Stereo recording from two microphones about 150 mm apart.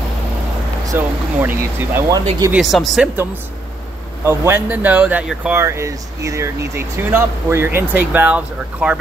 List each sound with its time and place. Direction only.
0.8 s speech: 15° right (ahead or behind)
2.5 s speech: centre (ahead or behind)
4.2 s speech: 15° right (ahead or behind)